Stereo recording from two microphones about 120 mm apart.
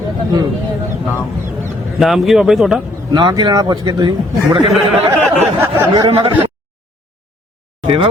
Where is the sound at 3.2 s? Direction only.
40° right (ahead or behind).